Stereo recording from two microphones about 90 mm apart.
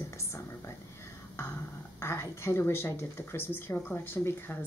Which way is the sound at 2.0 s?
30° left (ahead or behind).